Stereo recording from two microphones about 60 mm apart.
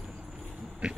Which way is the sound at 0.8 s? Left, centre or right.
Centre.